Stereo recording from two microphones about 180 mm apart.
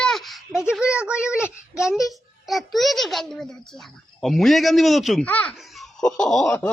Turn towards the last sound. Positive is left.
turn(degrees=5)  # may be behind; listen again after turning